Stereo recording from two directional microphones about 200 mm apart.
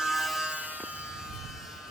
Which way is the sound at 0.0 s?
Centre (ahead or behind).